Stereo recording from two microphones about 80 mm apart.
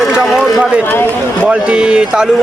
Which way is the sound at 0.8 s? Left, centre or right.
Left.